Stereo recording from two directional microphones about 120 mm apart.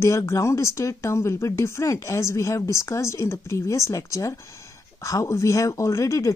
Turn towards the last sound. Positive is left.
turn(degrees=25)  # may be behind; listen again after turning